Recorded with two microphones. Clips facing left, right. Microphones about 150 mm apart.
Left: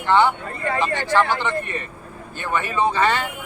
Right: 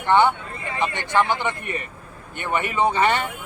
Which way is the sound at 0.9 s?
15° right (ahead or behind).